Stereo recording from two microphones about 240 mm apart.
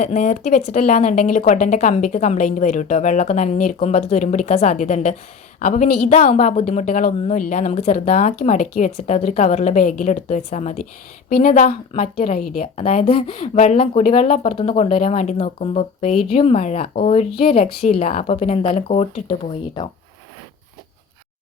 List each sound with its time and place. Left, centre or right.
0.0 s speech: left